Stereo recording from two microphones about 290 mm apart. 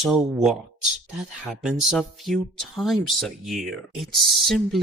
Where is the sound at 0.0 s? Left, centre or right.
Centre.